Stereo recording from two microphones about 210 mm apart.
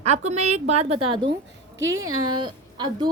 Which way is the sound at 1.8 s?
65° right (ahead or behind).